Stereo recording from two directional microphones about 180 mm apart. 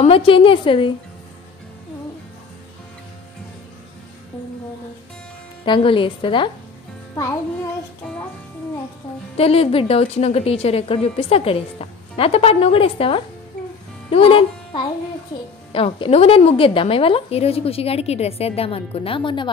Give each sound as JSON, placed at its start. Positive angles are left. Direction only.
{"t": 0.0, "sound": "a woman's voice", "side_deg": 30}
{"t": 5.7, "sound": "a woman's voice", "side_deg": 30}
{"t": 9.4, "sound": "a woman's voice", "side_deg": 30}